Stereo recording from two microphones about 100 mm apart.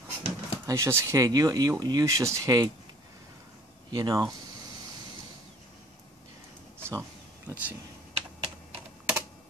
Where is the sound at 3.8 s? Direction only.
45° right (ahead or behind).